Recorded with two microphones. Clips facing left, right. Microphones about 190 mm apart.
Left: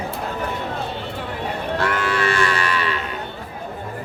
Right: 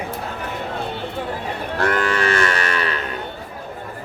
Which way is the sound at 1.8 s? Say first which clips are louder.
Right 3 dB; 45° right (ahead or behind).